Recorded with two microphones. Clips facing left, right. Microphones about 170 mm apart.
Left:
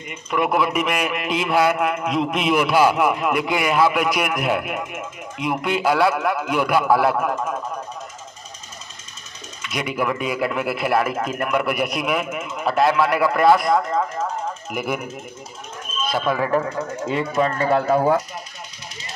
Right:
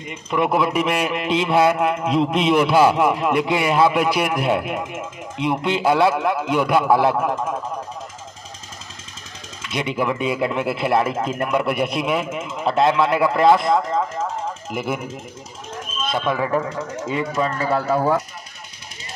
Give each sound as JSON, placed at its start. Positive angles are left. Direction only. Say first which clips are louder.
{"t": 0.1, "sound": "a man's voice", "louder": "right 1 dB", "side_deg": -30}
{"t": 9.7, "sound": "a man's voice", "louder": "right 1 dB", "side_deg": -25}
{"t": 16.3, "sound": "a man's voice", "louder": "left 1 dB", "side_deg": -10}
{"t": 17.6, "sound": "speech", "louder": "left 3 dB", "side_deg": 20}